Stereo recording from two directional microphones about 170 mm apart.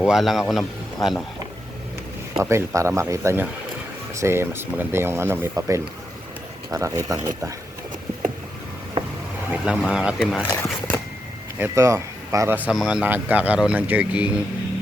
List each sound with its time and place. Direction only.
0.0 s speech: centre (ahead or behind)
2.4 s a man's voice: 15° right (ahead or behind)
9.0 s a sound: 30° right (ahead or behind)
9.5 s speech: 5° right (ahead or behind)
10.5 s a sound: 10° left (ahead or behind)
11.6 s a man's voice: 15° right (ahead or behind)